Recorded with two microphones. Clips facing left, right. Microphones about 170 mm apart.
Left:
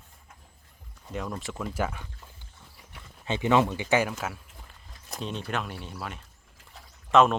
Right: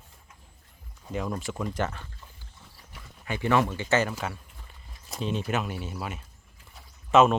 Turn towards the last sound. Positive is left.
turn(degrees=-5)  # may be behind; listen again after turning